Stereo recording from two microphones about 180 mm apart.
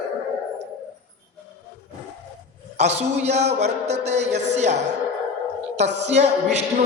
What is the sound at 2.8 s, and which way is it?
A man's voice, 35° right (ahead or behind).